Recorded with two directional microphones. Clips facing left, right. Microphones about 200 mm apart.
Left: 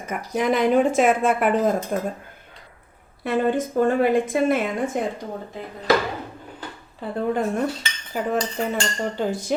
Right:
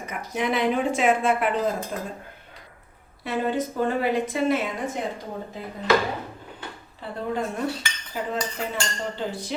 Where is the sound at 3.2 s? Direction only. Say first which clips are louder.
Left 4 dB; 50° left (ahead or behind).